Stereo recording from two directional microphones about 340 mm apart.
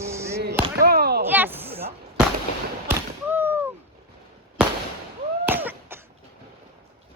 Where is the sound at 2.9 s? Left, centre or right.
Centre.